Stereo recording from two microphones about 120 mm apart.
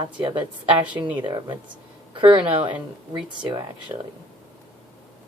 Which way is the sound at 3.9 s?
35° right (ahead or behind).